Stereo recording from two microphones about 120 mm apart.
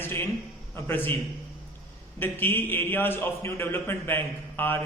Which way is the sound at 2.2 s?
15° left (ahead or behind).